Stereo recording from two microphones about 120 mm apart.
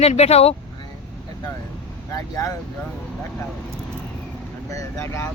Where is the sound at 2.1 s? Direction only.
30° left (ahead or behind).